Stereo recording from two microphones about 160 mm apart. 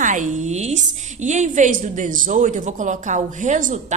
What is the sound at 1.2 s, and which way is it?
A woman's voice, 50° right (ahead or behind).